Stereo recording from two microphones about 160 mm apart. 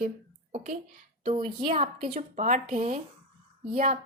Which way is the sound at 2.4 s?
50° right (ahead or behind).